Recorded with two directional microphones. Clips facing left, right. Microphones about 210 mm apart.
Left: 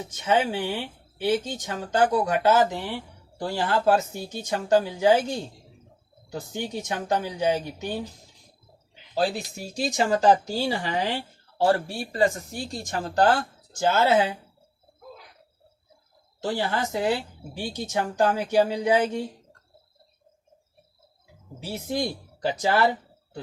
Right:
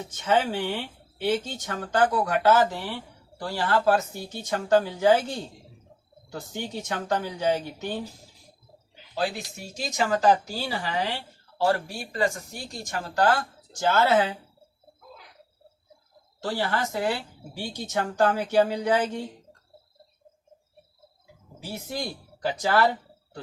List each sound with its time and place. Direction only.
0.1 s speech: 15° left (ahead or behind)
6.3 s speech: 15° left (ahead or behind)
9.1 s speech: 30° left (ahead or behind)
12.1 s speech: 30° left (ahead or behind); by 14.3 s 15° left (ahead or behind)
16.4 s speech: 20° left (ahead or behind)
22.4 s speech: 20° left (ahead or behind)